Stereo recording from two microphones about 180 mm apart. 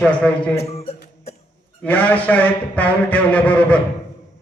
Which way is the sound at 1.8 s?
10° left (ahead or behind).